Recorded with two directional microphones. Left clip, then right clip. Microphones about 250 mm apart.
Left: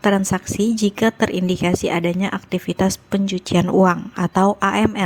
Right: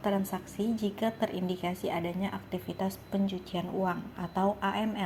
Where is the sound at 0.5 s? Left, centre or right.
Left.